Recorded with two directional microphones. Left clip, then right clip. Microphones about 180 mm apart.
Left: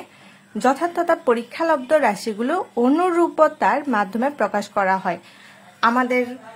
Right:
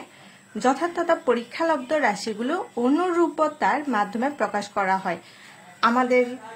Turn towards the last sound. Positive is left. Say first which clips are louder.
# left 1 dB
turn(degrees=30)  # may be behind; listen again after turning